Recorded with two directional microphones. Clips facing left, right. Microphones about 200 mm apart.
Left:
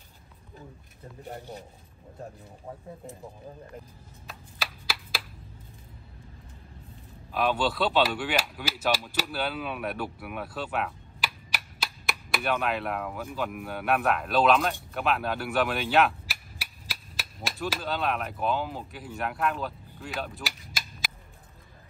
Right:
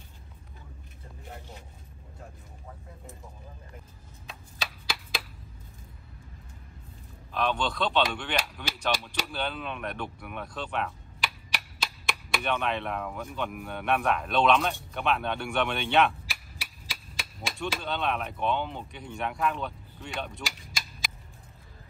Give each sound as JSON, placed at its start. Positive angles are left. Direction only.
{"t": 1.2, "sound": "speech", "side_deg": 35}
{"t": 4.3, "sound": "a sound", "side_deg": 5}
{"t": 7.3, "sound": "speech", "side_deg": 5}